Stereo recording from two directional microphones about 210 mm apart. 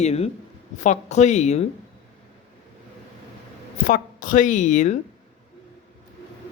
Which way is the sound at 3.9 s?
40° left (ahead or behind).